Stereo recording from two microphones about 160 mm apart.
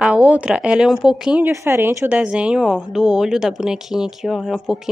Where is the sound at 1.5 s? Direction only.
15° right (ahead or behind).